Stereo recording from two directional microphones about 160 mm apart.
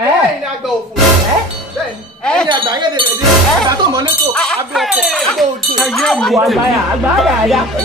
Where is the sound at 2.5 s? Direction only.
30° right (ahead or behind).